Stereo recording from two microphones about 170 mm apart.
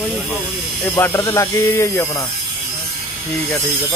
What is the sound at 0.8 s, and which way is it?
Speech, 10° left (ahead or behind).